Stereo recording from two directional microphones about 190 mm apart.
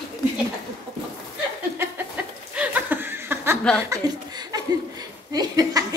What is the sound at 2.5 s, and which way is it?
Chuckle, 10° right (ahead or behind).